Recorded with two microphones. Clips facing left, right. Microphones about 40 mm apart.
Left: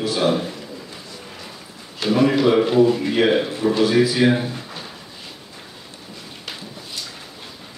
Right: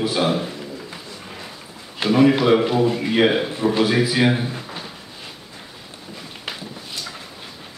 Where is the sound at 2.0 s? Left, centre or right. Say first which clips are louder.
Right 1 dB; right.